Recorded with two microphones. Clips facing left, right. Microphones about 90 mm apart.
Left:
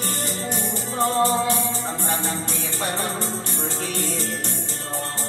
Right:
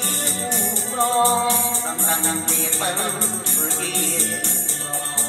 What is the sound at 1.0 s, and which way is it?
Music, 50° right (ahead or behind).